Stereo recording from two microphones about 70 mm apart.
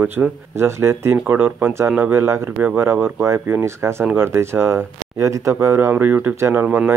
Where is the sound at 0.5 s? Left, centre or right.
Right.